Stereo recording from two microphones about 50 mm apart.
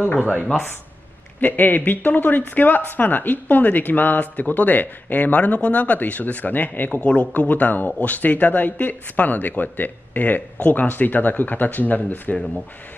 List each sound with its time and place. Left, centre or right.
0.0 s speech: left
6.9 s a man's voice: left
7.2 s speech: left